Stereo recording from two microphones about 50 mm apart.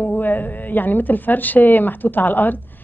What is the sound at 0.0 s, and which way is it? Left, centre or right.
A woman's voice, left.